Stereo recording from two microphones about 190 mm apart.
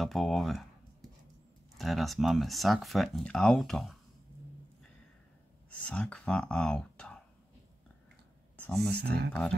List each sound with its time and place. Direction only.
0.0 s speech: centre (ahead or behind)
1.8 s speech: centre (ahead or behind)
5.7 s speech: 5° left (ahead or behind)
8.5 s speech: 5° left (ahead or behind)
8.9 s speech: 60° right (ahead or behind)